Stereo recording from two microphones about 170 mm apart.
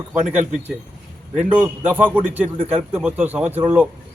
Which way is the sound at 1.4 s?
5° right (ahead or behind).